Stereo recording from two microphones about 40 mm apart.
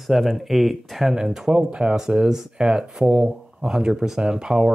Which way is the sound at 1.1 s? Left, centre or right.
Centre.